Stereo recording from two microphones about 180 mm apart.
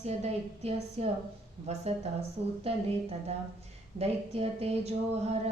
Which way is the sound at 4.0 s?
35° right (ahead or behind).